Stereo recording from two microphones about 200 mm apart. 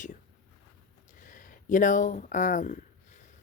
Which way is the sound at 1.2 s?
40° left (ahead or behind).